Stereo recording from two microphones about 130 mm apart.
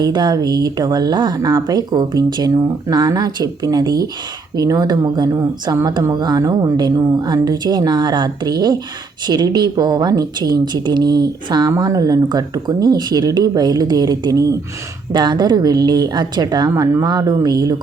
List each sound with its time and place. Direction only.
0.0 s speech: 30° right (ahead or behind)